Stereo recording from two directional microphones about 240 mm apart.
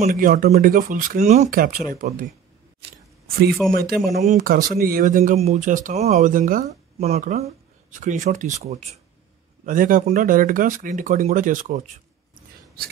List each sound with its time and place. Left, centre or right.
0.0 s speech: right
3.3 s a man's voice: right
4.0 s speech: centre
4.3 s speech: right